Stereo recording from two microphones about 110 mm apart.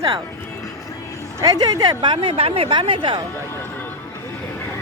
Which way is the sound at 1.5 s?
35° right (ahead or behind).